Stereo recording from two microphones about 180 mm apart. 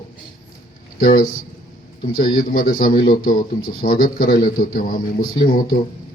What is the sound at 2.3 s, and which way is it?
A man's voice, 50° left (ahead or behind).